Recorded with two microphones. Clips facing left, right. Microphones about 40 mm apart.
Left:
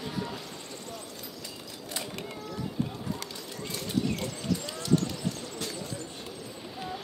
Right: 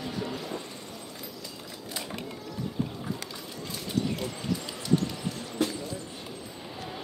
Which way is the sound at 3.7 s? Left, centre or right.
Centre.